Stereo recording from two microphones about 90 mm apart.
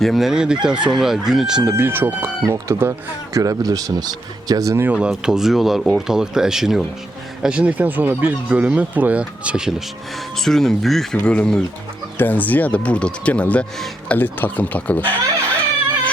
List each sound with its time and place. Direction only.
0.0 s chicken: centre (ahead or behind)
1.7 s speech: 25° right (ahead or behind)
3.3 s speech: 40° right (ahead or behind)
4.9 s speech: 10° right (ahead or behind)
7.4 s chicken: 10° right (ahead or behind)
10.3 s speech: 5° left (ahead or behind)